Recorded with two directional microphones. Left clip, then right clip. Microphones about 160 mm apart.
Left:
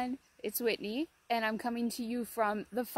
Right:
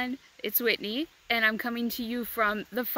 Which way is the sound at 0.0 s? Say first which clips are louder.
Right 4 dB; 15° right (ahead or behind).